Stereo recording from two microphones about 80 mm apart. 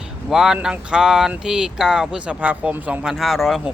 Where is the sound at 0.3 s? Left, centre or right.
Centre.